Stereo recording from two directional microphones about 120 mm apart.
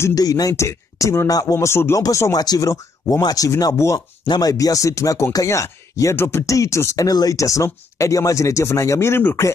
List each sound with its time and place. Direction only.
0.0 s speech: 30° left (ahead or behind)